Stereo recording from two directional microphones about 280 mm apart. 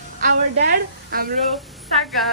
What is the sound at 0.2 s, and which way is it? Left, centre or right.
A woman's voice, right.